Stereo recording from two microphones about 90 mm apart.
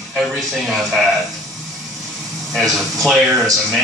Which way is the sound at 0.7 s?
5° right (ahead or behind).